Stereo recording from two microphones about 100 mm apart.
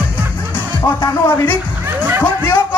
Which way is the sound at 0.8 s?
20° left (ahead or behind).